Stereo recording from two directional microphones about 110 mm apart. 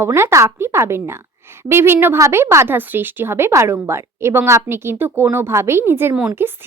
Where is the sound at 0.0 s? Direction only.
25° right (ahead or behind).